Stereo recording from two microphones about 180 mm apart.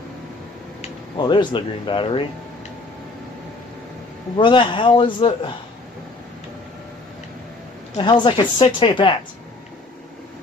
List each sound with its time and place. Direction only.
1.1 s a man's voice: 25° left (ahead or behind)
4.4 s a man's voice: 25° left (ahead or behind)
8.0 s a man's voice: 25° left (ahead or behind)